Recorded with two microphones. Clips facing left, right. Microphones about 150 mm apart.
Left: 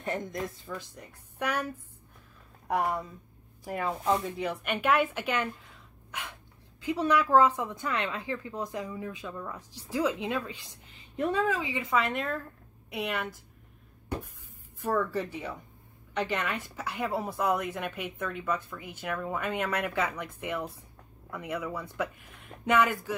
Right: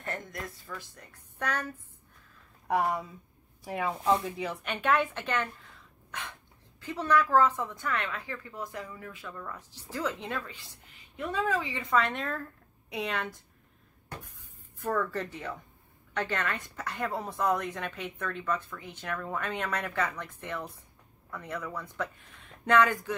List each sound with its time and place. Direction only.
0.0 s speech: 20° left (ahead or behind)
2.7 s speech: centre (ahead or behind)
6.1 s dog: 10° left (ahead or behind)
6.8 s speech: 15° left (ahead or behind)
11.9 s speech: centre (ahead or behind)
14.8 s speech: 10° left (ahead or behind)